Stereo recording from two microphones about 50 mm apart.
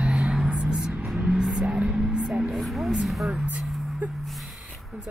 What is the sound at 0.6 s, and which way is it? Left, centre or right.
Vehicle, centre.